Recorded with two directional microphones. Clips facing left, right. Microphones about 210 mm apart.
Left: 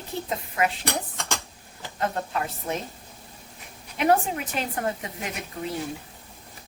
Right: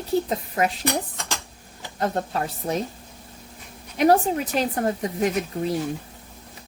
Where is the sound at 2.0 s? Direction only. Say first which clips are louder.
Right 3 dB; 35° right (ahead or behind).